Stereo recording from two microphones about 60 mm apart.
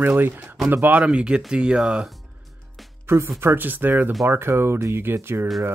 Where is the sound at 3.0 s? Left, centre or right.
Right.